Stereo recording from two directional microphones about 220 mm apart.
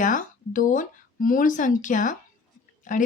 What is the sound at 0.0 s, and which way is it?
Speech, 35° left (ahead or behind).